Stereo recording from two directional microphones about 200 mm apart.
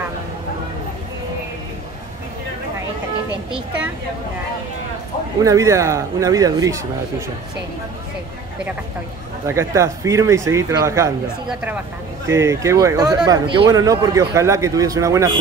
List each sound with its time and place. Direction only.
5.4 s speech: 15° right (ahead or behind)
9.5 s speech: 15° right (ahead or behind)
12.3 s speech: 15° right (ahead or behind)